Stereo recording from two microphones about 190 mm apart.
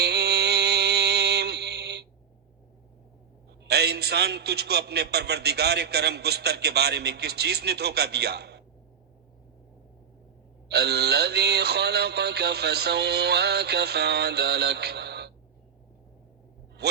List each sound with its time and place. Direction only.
0.0 s music: 60° right (ahead or behind)
3.6 s a man's voice: 60° right (ahead or behind)
10.7 s a man's voice: 60° right (ahead or behind)
16.8 s a man's voice: 60° right (ahead or behind)